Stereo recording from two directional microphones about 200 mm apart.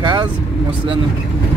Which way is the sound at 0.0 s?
25° right (ahead or behind).